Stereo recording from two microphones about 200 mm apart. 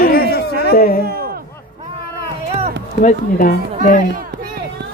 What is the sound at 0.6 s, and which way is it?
Speech, 50° left (ahead or behind).